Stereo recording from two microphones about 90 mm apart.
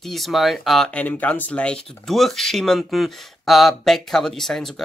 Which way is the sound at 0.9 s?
15° left (ahead or behind).